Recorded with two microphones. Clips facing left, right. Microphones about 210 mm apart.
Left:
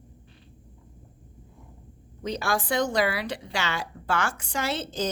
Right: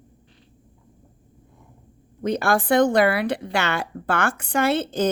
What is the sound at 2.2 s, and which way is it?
Speech, 55° right (ahead or behind).